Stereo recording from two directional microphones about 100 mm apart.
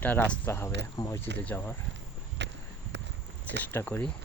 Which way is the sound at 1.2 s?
20° left (ahead or behind).